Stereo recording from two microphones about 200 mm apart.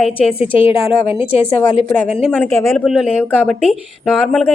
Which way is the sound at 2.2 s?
5° left (ahead or behind).